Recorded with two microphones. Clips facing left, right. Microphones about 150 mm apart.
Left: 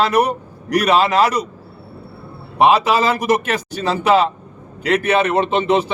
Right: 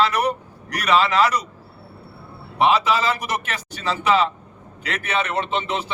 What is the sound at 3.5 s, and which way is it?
A man's voice, 45° left (ahead or behind).